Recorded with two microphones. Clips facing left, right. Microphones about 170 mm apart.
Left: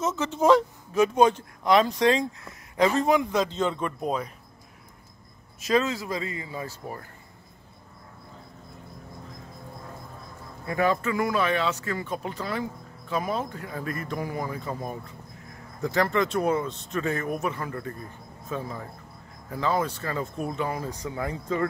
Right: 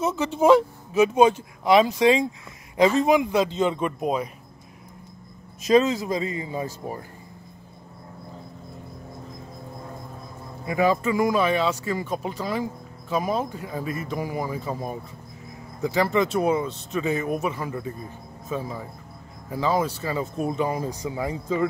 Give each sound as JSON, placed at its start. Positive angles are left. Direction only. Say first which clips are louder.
{"t": 0.0, "sound": "speech", "louder": "right 3 dB", "side_deg": -15}
{"t": 5.6, "sound": "speech", "louder": "right 6 dB", "side_deg": -20}
{"t": 10.6, "sound": "speech", "louder": "right 3 dB", "side_deg": -10}